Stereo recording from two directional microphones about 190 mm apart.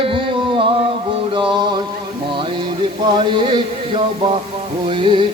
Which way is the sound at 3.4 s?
25° right (ahead or behind).